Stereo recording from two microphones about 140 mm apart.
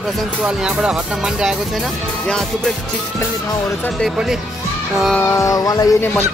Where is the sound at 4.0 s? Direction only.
5° right (ahead or behind).